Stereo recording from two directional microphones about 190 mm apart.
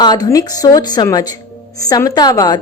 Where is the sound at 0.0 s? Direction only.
20° left (ahead or behind).